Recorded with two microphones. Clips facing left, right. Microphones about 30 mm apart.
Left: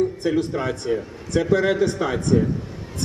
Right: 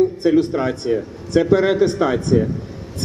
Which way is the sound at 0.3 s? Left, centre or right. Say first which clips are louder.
Right 6 dB; right.